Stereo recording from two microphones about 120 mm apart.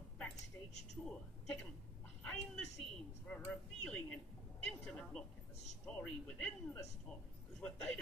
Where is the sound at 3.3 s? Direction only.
10° left (ahead or behind).